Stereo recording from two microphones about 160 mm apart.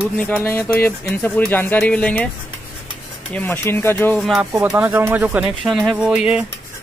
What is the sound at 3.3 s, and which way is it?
Speech, 10° left (ahead or behind).